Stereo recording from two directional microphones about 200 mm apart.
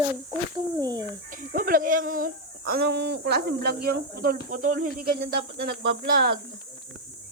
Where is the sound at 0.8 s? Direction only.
20° right (ahead or behind).